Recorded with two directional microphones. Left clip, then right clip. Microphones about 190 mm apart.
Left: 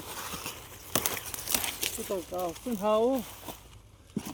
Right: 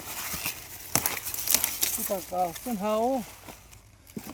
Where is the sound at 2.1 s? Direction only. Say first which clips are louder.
Right 6 dB; 60° right (ahead or behind).